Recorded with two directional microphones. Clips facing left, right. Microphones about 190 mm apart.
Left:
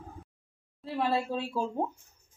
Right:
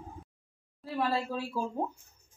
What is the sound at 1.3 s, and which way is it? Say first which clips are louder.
Speech: left 2 dB; 25° left (ahead or behind).